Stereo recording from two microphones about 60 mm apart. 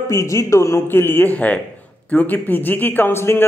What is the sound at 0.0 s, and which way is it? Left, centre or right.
A man's voice, left.